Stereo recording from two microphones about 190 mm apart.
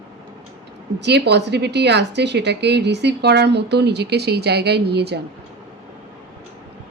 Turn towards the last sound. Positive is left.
turn(degrees=-60)  # may be behind; listen again after turning